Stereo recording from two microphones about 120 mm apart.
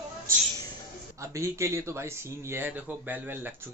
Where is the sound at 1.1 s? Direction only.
25° right (ahead or behind).